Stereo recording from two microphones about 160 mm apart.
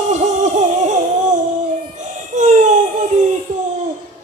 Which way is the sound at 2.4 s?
50° right (ahead or behind).